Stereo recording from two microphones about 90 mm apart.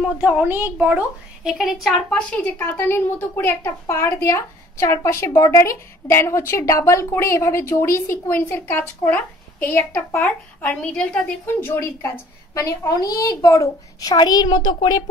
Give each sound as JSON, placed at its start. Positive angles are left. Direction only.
{"t": 0.0, "sound": "a woman's voice", "side_deg": -15}
{"t": 1.5, "sound": "a woman's voice", "side_deg": -5}
{"t": 2.3, "sound": "a woman's voice", "side_deg": 20}
{"t": 11.4, "sound": "a woman's voice", "side_deg": 25}
{"t": 12.5, "sound": "a child's voice", "side_deg": 40}
{"t": 14.1, "sound": "a woman's voice", "side_deg": 50}